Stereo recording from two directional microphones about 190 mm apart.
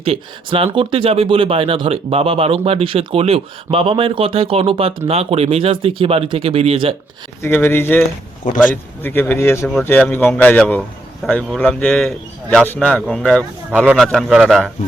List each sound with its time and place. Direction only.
0.0 s speech: 30° right (ahead or behind)
7.4 s a man's voice: 10° left (ahead or behind)
13.7 s a man's voice: 10° right (ahead or behind)